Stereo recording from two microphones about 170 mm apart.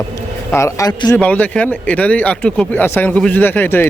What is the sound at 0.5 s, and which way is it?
Speech, 20° left (ahead or behind).